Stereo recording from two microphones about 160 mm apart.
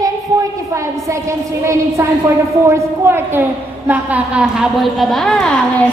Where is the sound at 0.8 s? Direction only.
20° right (ahead or behind).